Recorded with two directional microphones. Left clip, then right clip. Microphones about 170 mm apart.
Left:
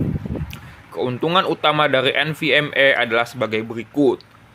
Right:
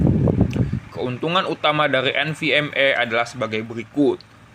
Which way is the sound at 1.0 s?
15° left (ahead or behind).